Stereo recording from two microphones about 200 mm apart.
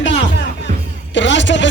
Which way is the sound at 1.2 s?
65° left (ahead or behind).